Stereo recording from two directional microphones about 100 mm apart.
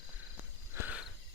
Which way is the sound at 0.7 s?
15° right (ahead or behind).